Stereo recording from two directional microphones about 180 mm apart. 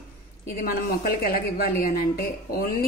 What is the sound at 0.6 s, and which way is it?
Speech, 55° left (ahead or behind).